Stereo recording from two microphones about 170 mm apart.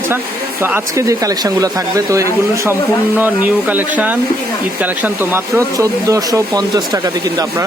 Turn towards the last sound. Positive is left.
turn(degrees=-20)  # may be behind; listen again after turning